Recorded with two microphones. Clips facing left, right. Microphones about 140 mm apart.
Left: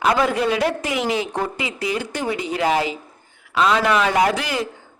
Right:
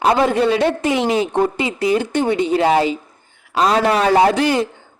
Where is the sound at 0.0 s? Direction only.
30° right (ahead or behind).